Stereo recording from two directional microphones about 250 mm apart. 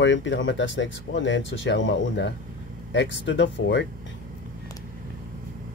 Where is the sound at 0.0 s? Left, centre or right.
Left.